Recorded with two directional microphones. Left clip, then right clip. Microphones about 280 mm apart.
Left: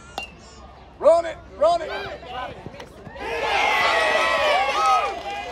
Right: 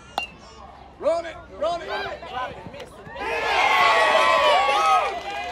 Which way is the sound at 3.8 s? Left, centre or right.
Right.